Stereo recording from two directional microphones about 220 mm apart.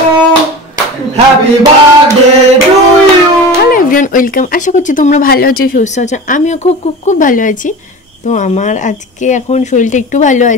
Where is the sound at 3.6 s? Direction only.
40° left (ahead or behind).